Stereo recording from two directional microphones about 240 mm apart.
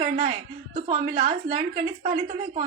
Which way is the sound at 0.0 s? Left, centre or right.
Right.